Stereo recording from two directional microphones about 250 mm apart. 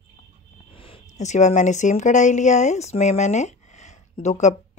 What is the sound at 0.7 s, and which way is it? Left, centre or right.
Speech, left.